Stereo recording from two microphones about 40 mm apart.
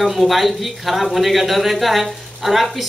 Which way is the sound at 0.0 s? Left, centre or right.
Centre.